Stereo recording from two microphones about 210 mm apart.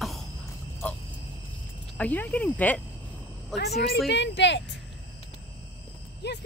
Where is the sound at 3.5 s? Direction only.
50° left (ahead or behind).